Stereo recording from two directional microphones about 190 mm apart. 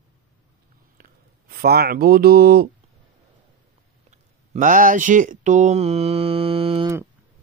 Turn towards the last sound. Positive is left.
turn(degrees=-30)  # may be behind; listen again after turning